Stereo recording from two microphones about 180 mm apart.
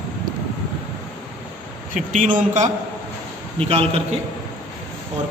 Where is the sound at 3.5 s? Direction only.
35° right (ahead or behind).